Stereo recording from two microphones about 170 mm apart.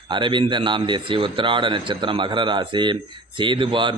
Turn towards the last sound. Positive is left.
turn(degrees=-30)  # may be behind; listen again after turning